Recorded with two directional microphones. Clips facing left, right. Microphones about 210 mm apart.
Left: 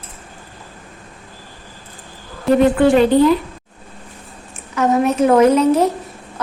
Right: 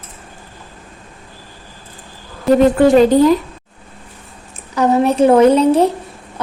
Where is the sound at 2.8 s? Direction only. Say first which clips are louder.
Right 2 dB; 40° right (ahead or behind).